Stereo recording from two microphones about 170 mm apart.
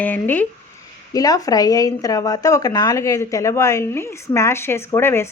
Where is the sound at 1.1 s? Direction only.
20° left (ahead or behind).